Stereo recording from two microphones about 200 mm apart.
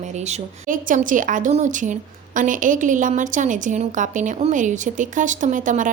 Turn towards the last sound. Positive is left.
turn(degrees=-40)  # may be behind; listen again after turning